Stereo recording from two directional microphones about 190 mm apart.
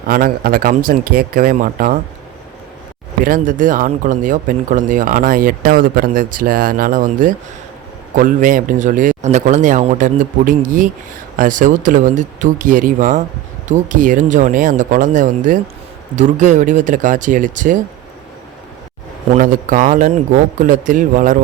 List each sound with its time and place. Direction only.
0.1 s speech: 50° right (ahead or behind)
3.2 s speech: 45° right (ahead or behind)
19.3 s speech: 45° right (ahead or behind)